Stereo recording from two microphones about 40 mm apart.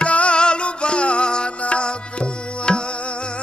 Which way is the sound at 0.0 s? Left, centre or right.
Left.